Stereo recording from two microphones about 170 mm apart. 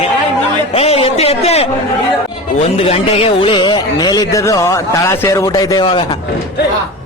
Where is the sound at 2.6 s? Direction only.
35° left (ahead or behind).